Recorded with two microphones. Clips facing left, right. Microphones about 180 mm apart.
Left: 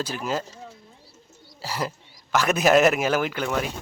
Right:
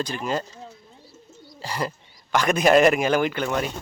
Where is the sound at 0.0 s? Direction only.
5° left (ahead or behind).